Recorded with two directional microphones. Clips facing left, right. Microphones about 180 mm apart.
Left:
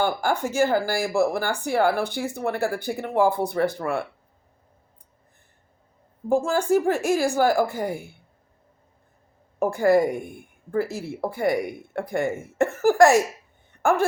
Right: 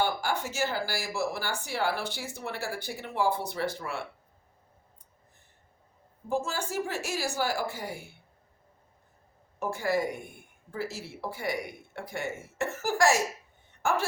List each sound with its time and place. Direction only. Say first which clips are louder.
0.0 s speech: left 6 dB; 55° left (ahead or behind)
6.2 s speech: left 10 dB; 55° left (ahead or behind)
9.6 s speech: left 10 dB; 55° left (ahead or behind)